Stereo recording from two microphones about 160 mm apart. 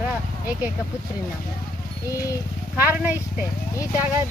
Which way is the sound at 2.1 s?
20° left (ahead or behind).